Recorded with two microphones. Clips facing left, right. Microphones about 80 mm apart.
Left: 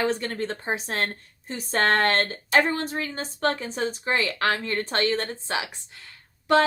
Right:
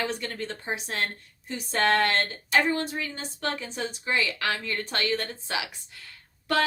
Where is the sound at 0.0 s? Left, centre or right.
Left.